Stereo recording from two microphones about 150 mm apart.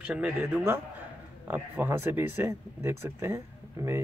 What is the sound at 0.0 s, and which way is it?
Speech, 10° right (ahead or behind).